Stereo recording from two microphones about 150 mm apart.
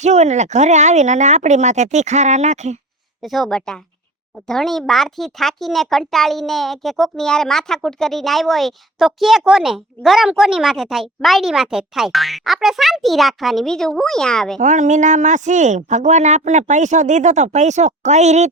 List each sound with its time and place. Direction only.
0.0 s speech: 50° right (ahead or behind)
3.2 s speech: centre (ahead or behind)
14.6 s speech: 55° right (ahead or behind)